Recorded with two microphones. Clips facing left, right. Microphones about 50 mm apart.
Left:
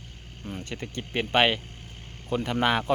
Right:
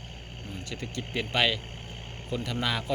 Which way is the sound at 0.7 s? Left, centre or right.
Left.